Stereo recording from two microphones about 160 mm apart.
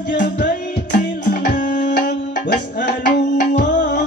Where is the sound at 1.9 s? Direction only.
90° left.